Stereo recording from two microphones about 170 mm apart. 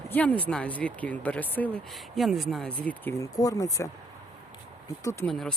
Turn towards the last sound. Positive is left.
turn(degrees=5)  # may be behind; listen again after turning